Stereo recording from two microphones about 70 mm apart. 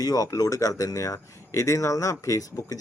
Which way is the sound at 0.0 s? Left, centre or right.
Left.